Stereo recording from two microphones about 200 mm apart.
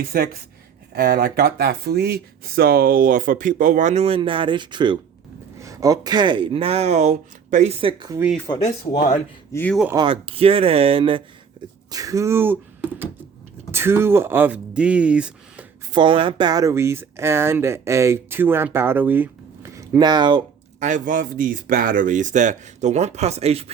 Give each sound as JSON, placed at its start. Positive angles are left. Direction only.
{"t": 0.0, "sound": "speech", "side_deg": -50}
{"t": 8.5, "sound": "speech", "side_deg": 30}
{"t": 9.5, "sound": "speech", "side_deg": 10}
{"t": 9.9, "sound": "speech", "side_deg": -25}
{"t": 11.9, "sound": "speech", "side_deg": -15}
{"t": 13.7, "sound": "speech", "side_deg": -10}
{"t": 15.9, "sound": "speech", "side_deg": -25}
{"t": 20.7, "sound": "speech", "side_deg": -40}